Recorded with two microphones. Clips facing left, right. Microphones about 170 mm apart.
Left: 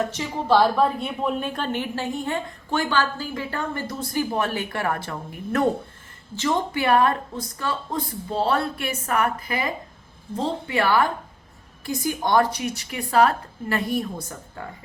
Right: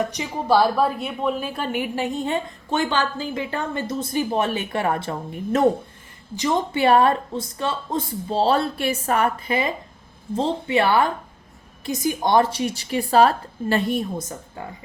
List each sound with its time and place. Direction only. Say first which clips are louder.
0.0 s a woman's voice: right 1 dB; 15° right (ahead or behind)
6.7 s a woman's voice: right 4 dB; 25° right (ahead or behind)